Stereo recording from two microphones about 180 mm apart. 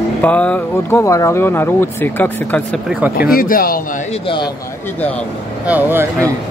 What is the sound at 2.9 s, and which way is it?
Speech, 5° right (ahead or behind).